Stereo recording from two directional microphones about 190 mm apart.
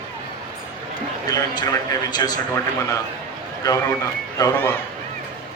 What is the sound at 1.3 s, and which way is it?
A man's voice, 20° left (ahead or behind).